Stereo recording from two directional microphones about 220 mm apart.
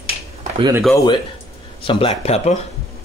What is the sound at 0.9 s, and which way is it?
Speech, 20° left (ahead or behind).